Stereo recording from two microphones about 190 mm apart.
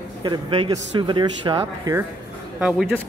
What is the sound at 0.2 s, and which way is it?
Speech, 20° right (ahead or behind).